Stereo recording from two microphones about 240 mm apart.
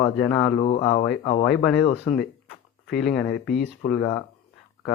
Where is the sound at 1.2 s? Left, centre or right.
Left.